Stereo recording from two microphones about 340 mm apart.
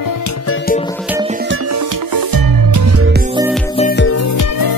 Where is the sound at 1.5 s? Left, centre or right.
Right.